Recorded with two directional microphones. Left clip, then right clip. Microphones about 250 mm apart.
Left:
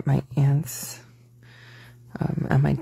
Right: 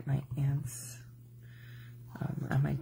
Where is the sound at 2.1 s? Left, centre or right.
Left.